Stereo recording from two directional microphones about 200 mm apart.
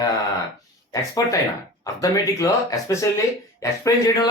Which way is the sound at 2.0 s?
15° left (ahead or behind).